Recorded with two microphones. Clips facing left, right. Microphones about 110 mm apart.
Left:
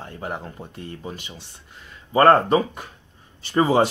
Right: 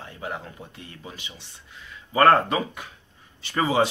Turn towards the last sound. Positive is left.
turn(degrees=45)  # may be behind; listen again after turning